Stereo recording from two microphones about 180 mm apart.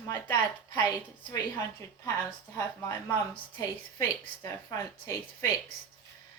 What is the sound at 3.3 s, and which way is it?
A woman's voice, 20° left (ahead or behind).